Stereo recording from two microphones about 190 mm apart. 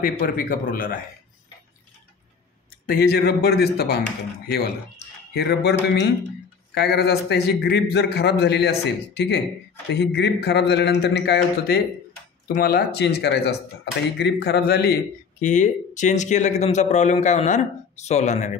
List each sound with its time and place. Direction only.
0.4 s speech: 50° left (ahead or behind)
2.9 s a man's voice: 50° left (ahead or behind)
15.4 s speech: 40° left (ahead or behind)